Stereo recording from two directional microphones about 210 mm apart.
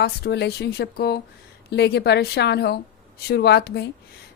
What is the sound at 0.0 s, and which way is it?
A woman's voice, 50° left (ahead or behind).